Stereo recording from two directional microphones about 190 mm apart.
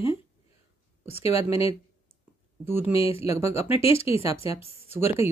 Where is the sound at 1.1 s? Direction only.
30° left (ahead or behind).